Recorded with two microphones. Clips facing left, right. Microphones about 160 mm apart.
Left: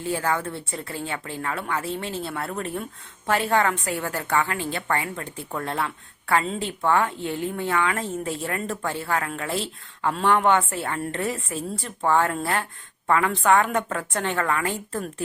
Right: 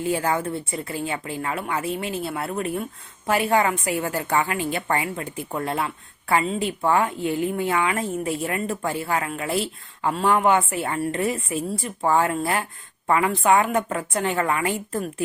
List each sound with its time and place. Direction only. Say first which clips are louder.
0.0 s a woman's voice: right 2 dB; 15° right (ahead or behind)